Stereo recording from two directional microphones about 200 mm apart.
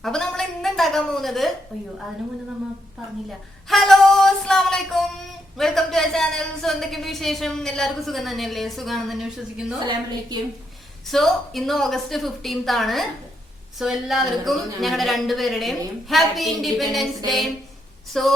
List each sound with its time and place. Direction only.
0.0 s a sound: centre (ahead or behind)
1.7 s speech: centre (ahead or behind)
3.7 s female singing: centre (ahead or behind)
5.5 s speech: centre (ahead or behind)
9.8 s a woman's voice: 20° right (ahead or behind)
11.0 s speech: centre (ahead or behind)
18.1 s speech: centre (ahead or behind)